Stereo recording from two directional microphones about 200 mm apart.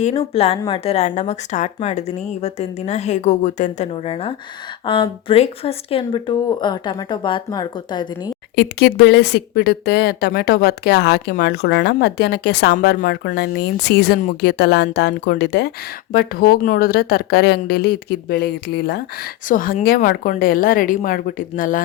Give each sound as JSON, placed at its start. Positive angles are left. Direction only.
{"t": 0.0, "sound": "speech", "side_deg": 30}
{"t": 8.5, "sound": "speech", "side_deg": 55}